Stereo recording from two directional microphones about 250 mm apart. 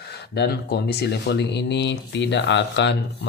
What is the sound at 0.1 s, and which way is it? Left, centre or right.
Speech, left.